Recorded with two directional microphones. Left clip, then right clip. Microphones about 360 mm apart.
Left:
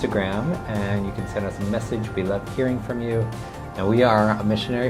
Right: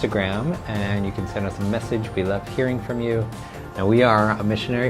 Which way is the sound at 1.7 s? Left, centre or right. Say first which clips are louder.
Right 2 dB; centre.